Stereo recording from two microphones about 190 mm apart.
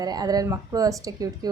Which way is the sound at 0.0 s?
20° right (ahead or behind).